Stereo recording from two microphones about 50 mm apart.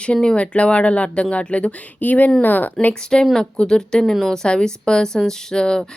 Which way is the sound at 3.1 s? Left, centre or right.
Centre.